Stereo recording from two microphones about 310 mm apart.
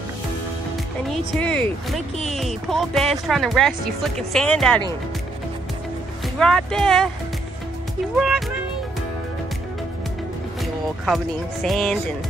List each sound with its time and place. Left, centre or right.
1.1 s speech: centre
6.2 s speech: centre
8.2 s speech: centre
11.6 s speech: centre